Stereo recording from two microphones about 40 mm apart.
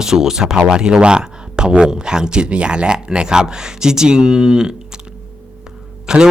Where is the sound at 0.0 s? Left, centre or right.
Centre.